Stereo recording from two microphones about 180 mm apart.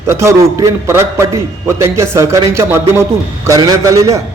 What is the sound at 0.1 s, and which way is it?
A man's voice, 15° right (ahead or behind).